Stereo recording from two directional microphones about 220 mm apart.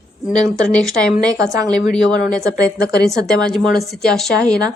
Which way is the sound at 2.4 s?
15° right (ahead or behind).